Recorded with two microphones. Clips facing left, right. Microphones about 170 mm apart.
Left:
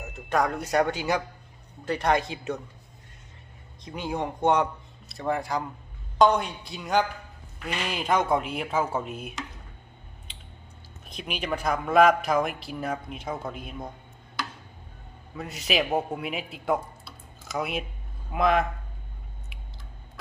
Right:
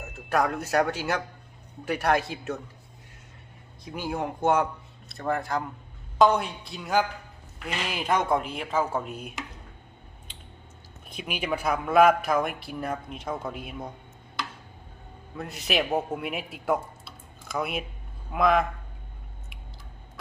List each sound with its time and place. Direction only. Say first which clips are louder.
0.0 s a man's voice: even; centre (ahead or behind)
3.8 s a man's voice: even; 5° right (ahead or behind)
11.2 s a man's voice: right 1 dB; 5° right (ahead or behind)
15.4 s a man's voice: left 1 dB; centre (ahead or behind)